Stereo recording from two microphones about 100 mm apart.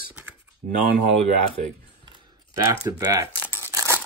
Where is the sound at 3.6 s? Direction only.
25° right (ahead or behind).